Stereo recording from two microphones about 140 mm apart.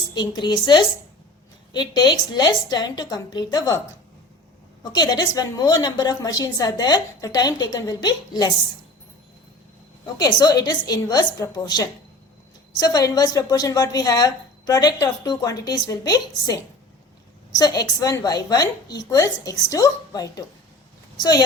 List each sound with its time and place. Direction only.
0.1 s a woman's voice: 30° left (ahead or behind)
4.8 s a woman's voice: 25° left (ahead or behind)
10.2 s a woman's voice: 30° left (ahead or behind)